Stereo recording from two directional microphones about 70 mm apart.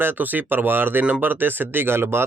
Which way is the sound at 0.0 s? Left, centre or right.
Right.